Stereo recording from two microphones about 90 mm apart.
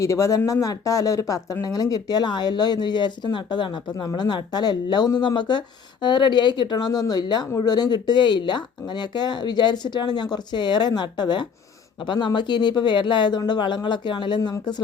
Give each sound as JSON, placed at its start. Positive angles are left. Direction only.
{"t": 0.0, "sound": "speech", "side_deg": 35}
{"t": 3.9, "sound": "speech", "side_deg": 45}